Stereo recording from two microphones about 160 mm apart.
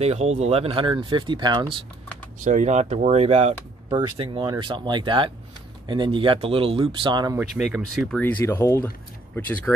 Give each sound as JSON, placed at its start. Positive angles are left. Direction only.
{"t": 0.0, "sound": "speech", "side_deg": -40}
{"t": 2.4, "sound": "speech", "side_deg": -45}
{"t": 3.9, "sound": "speech", "side_deg": -30}
{"t": 7.3, "sound": "speech", "side_deg": -5}
{"t": 8.2, "sound": "speech", "side_deg": 10}